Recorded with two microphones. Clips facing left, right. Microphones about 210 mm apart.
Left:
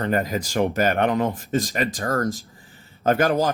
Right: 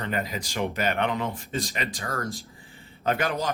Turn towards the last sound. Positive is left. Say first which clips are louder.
# left 7 dB
turn(degrees=45)  # may be behind; listen again after turning